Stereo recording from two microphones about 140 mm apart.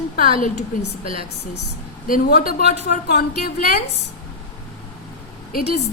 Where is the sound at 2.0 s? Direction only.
85° left.